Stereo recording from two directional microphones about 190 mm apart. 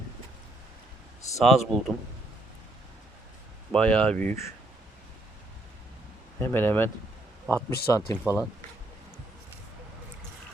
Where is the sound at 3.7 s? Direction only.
5° left (ahead or behind).